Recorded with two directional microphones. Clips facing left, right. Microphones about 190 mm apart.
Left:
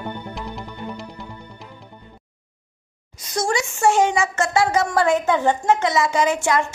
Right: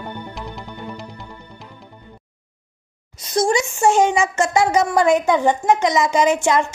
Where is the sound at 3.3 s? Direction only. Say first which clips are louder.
Right 5 dB; 20° right (ahead or behind).